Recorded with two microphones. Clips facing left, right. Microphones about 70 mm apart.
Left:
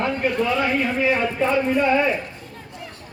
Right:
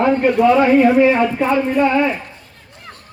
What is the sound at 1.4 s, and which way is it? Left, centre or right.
Speech, right.